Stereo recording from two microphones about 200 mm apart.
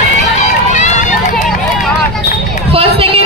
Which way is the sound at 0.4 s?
35° left (ahead or behind).